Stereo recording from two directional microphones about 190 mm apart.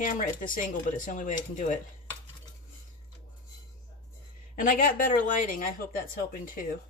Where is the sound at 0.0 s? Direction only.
45° left (ahead or behind).